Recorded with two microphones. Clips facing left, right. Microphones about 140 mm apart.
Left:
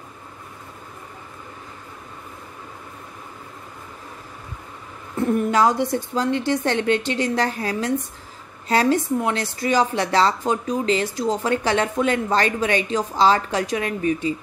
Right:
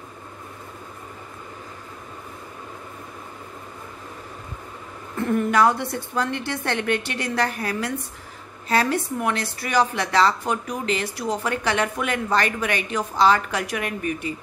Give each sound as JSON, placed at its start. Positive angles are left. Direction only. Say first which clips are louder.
{"t": 5.2, "sound": "speech", "louder": "left 1 dB", "side_deg": 20}